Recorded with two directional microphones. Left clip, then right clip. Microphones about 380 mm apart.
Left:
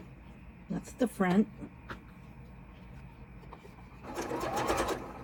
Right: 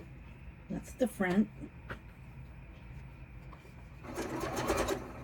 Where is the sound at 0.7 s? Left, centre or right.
Left.